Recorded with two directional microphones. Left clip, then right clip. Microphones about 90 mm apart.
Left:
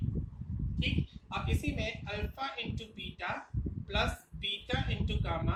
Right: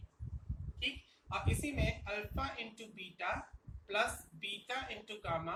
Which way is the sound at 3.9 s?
35° right (ahead or behind).